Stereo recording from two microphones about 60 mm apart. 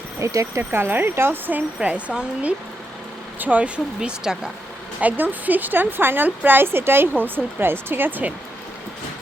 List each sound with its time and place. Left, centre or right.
0.3 s speech: right
0.7 s speech: right
4.0 s speech: centre
4.9 s speech: right